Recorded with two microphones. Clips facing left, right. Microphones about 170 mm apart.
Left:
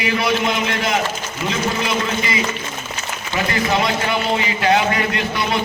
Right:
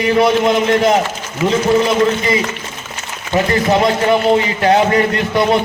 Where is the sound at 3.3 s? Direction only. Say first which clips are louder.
Right 6 dB; 40° right (ahead or behind).